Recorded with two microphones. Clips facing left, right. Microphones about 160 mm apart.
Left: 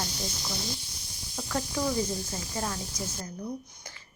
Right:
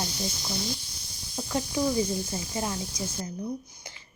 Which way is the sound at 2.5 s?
15° right (ahead or behind).